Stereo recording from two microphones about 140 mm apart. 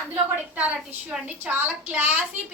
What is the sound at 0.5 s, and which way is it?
A woman's voice, 10° right (ahead or behind).